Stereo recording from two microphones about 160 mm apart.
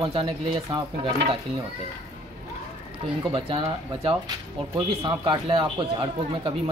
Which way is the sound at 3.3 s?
35° right (ahead or behind).